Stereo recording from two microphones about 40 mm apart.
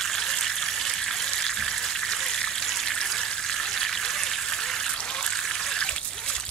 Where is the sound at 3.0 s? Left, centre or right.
Centre.